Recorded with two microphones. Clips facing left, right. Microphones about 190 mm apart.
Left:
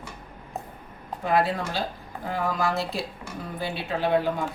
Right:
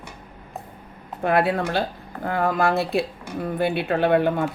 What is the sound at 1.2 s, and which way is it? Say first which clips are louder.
A woman's voice: right 4 dB; 60° right (ahead or behind).